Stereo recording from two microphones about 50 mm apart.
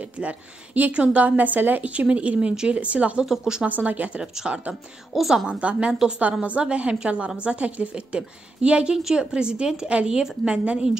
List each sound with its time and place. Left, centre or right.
0.0 s a woman's voice: right
1.9 s a woman's voice: right
3.3 s speech: centre
3.6 s a woman's voice: right
4.2 s speech: centre
5.1 s a woman's voice: centre
5.5 s a woman's voice: right